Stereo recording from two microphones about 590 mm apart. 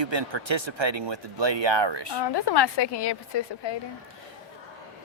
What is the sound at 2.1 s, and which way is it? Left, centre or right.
A woman's voice, left.